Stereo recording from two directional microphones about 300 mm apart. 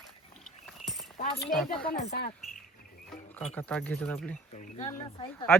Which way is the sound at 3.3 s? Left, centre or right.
Centre.